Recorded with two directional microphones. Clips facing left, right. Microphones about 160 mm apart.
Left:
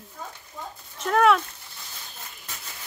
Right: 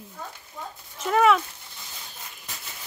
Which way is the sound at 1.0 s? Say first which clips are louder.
Even; 5° right (ahead or behind).